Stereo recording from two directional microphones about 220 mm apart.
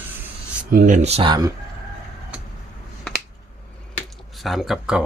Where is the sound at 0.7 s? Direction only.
40° right (ahead or behind); by 1.5 s 15° right (ahead or behind).